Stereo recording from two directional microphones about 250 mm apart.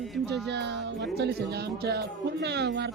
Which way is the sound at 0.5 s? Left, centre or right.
Right.